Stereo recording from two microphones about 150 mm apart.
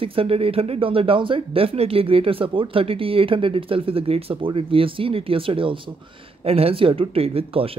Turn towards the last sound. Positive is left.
turn(degrees=-40)  # may be behind; listen again after turning